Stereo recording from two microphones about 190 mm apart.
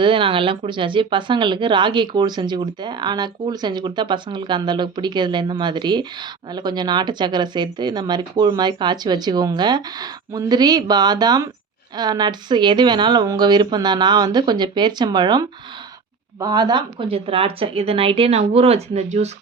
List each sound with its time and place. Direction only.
0.0 s speech: 25° right (ahead or behind)